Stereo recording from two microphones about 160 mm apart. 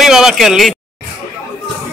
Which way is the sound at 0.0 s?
Centre (ahead or behind).